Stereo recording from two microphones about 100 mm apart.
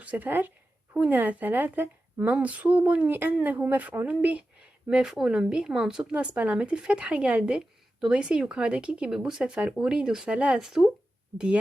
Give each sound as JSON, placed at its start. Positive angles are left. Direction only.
{"t": 0.0, "sound": "a woman's voice", "side_deg": -15}